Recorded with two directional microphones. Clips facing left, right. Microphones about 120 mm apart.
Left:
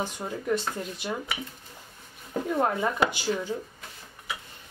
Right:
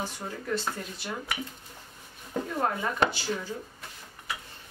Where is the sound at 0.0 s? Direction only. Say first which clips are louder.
Left 4 dB; 15° left (ahead or behind).